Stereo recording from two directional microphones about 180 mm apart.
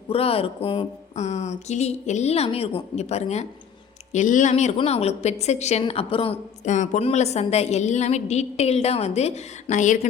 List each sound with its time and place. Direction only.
0.1 s a woman's voice: 30° left (ahead or behind)